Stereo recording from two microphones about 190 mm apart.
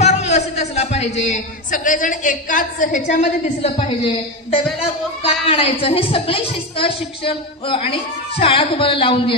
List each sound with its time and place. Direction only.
0.0 s music: 35° left (ahead or behind)
1.2 s a woman's voice: 40° left (ahead or behind)
5.2 s a woman's voice: 30° left (ahead or behind)